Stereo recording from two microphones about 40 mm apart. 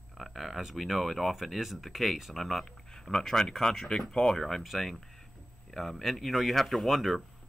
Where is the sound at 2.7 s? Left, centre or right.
Centre.